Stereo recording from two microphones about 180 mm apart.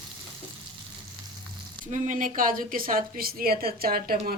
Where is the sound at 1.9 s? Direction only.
45° right (ahead or behind).